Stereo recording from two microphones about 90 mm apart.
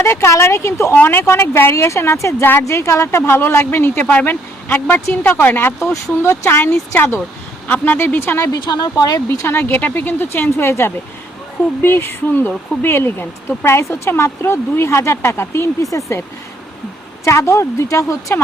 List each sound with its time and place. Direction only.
0.0 s speech: 30° left (ahead or behind)
8.6 s speech: 50° left (ahead or behind)
9.5 s speech: 25° left (ahead or behind)
17.2 s speech: 30° left (ahead or behind)